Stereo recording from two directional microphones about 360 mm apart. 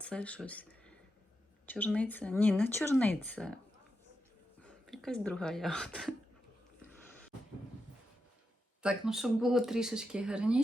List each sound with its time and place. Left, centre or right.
0.0 s speech: centre
4.6 s speech: centre
8.8 s speech: centre